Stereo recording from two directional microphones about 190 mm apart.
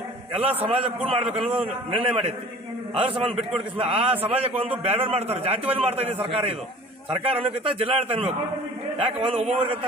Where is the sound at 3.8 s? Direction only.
30° right (ahead or behind).